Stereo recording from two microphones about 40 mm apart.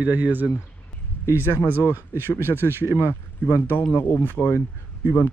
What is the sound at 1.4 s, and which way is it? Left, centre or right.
Speech, left.